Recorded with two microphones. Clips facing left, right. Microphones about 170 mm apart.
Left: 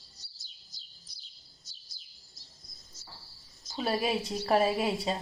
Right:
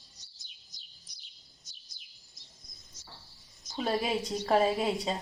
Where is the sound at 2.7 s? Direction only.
15° right (ahead or behind).